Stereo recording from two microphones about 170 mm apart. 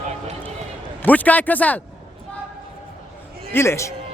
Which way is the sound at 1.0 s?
10° left (ahead or behind).